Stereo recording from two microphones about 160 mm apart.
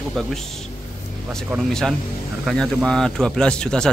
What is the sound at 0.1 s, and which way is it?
Speech, centre (ahead or behind).